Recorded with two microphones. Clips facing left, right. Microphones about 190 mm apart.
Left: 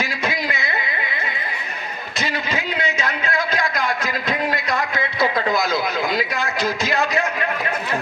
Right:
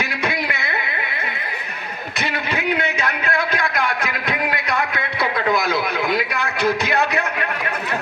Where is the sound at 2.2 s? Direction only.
60° right (ahead or behind).